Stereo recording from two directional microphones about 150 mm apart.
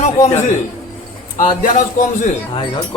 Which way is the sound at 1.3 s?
55° left (ahead or behind).